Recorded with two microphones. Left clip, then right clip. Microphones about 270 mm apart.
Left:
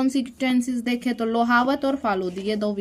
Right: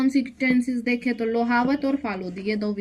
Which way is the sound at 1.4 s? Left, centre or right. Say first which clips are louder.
Left 5 dB; left.